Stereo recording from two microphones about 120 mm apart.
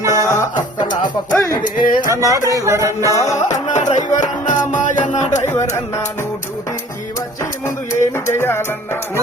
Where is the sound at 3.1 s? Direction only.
25° left (ahead or behind).